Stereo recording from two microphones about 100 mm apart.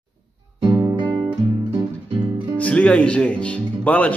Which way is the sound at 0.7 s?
35° right (ahead or behind).